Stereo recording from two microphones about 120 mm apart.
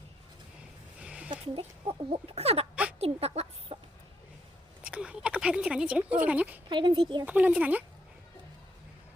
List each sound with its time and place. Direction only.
0.9 s a sound: 10° right (ahead or behind)
1.3 s speech: 50° right (ahead or behind)
3.0 s chicken: 55° right (ahead or behind)
4.8 s speech: 10° right (ahead or behind)
6.7 s speech: 40° right (ahead or behind)
7.3 s speech: 10° right (ahead or behind)